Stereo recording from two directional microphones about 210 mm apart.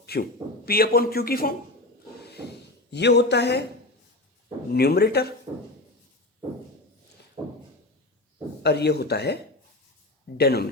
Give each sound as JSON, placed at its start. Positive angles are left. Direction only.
{"t": 0.0, "sound": "a man's voice", "side_deg": 50}
{"t": 2.9, "sound": "a man's voice", "side_deg": 55}
{"t": 4.7, "sound": "a man's voice", "side_deg": 50}
{"t": 8.6, "sound": "a man's voice", "side_deg": 50}